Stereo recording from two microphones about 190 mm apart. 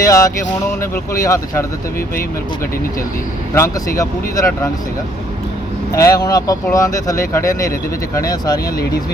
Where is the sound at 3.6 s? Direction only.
15° left (ahead or behind).